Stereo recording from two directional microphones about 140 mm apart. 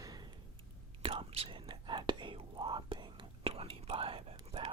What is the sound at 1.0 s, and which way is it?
Whispering, 45° right (ahead or behind).